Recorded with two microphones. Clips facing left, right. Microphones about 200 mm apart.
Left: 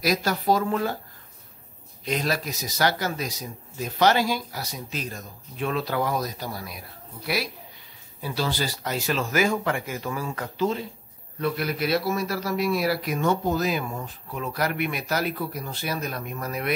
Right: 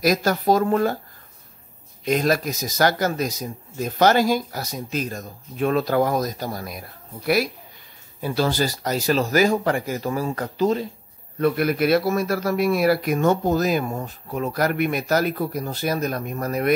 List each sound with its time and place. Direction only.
0.0 s a man's voice: 45° right (ahead or behind)
2.0 s a man's voice: 45° right (ahead or behind)
8.2 s speech: 45° right (ahead or behind)
11.3 s a man's voice: 55° right (ahead or behind)